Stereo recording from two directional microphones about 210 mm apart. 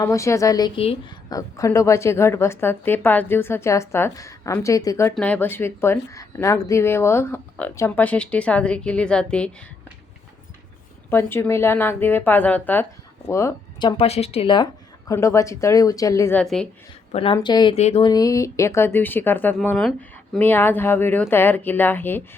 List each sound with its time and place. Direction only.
0.0 s speech: 15° left (ahead or behind)
11.1 s speech: 10° left (ahead or behind)
17.1 s a woman's voice: 25° left (ahead or behind)
18.1 s speech: 15° left (ahead or behind)